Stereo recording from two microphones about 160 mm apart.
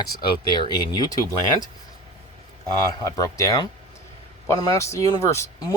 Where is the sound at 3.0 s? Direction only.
20° left (ahead or behind).